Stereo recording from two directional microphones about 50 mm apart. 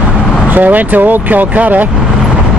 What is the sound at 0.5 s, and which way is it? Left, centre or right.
Speech, right.